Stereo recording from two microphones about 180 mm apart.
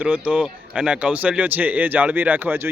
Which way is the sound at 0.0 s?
5° right (ahead or behind).